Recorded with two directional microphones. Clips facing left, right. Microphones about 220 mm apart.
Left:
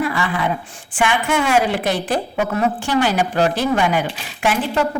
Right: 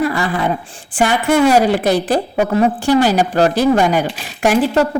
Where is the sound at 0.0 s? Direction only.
40° right (ahead or behind).